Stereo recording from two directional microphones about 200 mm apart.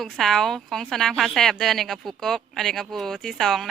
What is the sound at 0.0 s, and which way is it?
A woman's voice, centre (ahead or behind).